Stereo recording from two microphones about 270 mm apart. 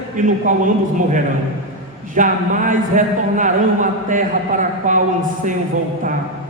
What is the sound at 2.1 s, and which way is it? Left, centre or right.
A man's voice, right.